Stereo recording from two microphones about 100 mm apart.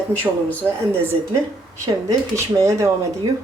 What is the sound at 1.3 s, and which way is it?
Speech, 30° right (ahead or behind).